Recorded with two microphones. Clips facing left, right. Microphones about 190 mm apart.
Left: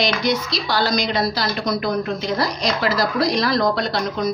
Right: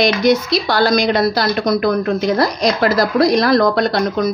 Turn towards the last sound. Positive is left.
turn(degrees=-55)  # may be behind; listen again after turning